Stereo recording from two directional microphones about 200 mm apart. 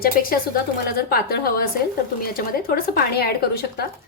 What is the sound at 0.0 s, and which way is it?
A woman's voice, 45° left (ahead or behind).